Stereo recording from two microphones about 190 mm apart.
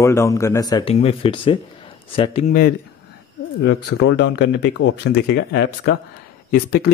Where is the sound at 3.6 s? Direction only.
70° left (ahead or behind).